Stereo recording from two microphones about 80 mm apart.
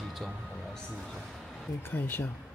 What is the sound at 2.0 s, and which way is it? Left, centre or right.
Speech, left.